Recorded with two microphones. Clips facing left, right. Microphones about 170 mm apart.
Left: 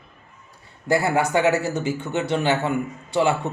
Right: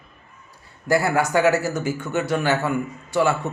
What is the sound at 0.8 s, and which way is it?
Speech, 25° left (ahead or behind).